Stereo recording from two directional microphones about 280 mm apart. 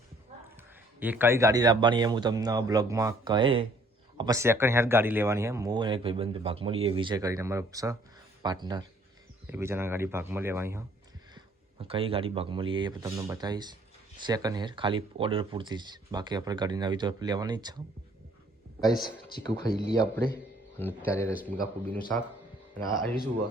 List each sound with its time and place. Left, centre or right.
0.9 s speech: centre
11.3 s speech: centre
18.8 s a man's voice: centre